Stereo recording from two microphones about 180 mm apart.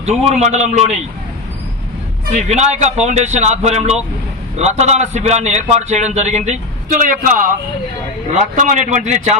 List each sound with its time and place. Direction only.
0.0 s a man's voice: 40° right (ahead or behind)
2.3 s a man's voice: 40° right (ahead or behind)